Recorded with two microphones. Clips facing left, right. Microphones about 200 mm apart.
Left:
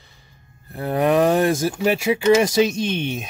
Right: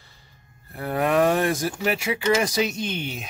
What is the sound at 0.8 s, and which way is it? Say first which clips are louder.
Speech: left 3 dB; 20° left (ahead or behind).